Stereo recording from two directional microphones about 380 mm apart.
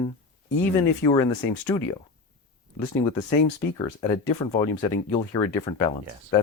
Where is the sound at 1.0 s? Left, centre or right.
Centre.